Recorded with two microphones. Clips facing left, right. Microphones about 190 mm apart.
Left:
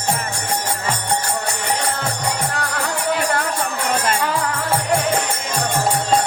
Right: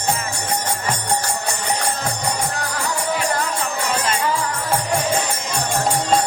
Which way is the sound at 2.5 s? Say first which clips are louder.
Left 1 dB; 65° left (ahead or behind).